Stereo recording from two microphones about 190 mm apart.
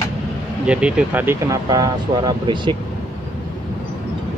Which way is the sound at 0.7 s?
5° right (ahead or behind).